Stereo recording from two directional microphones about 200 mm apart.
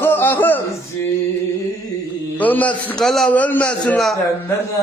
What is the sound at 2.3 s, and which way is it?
A man's voice, 10° left (ahead or behind).